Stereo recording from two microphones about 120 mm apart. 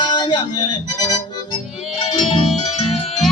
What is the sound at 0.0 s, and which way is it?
Speech, 35° left (ahead or behind).